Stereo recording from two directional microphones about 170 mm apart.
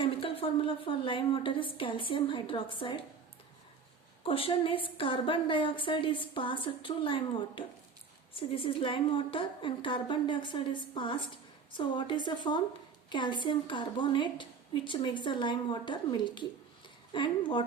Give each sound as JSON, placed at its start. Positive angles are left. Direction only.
{"t": 0.0, "sound": "a woman's voice", "side_deg": 35}
{"t": 4.2, "sound": "a woman's voice", "side_deg": 35}